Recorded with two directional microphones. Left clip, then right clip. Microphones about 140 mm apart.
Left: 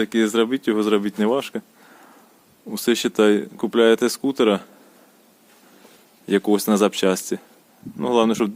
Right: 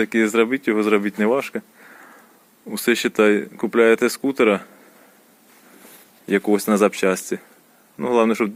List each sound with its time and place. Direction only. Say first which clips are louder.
0.0 s speech: right 2 dB; 10° left (ahead or behind)
6.2 s speech: even; 25° left (ahead or behind)